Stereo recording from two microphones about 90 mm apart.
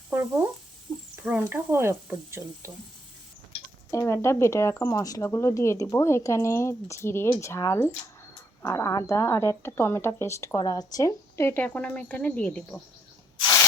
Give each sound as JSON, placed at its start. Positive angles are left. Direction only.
{"t": 0.1, "sound": "frying", "side_deg": -25}
{"t": 1.1, "sound": "speech", "side_deg": -15}
{"t": 3.9, "sound": "speech", "side_deg": 30}
{"t": 11.0, "sound": "speech", "side_deg": 30}
{"t": 11.6, "sound": "speech", "side_deg": 15}